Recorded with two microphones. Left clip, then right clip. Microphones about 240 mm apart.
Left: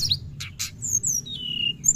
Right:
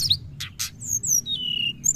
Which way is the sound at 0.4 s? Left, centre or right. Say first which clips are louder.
Right 1 dB; right.